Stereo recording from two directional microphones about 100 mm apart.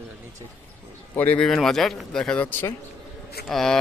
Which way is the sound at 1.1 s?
20° left (ahead or behind).